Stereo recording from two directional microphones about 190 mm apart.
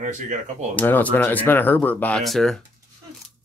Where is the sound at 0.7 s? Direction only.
10° left (ahead or behind).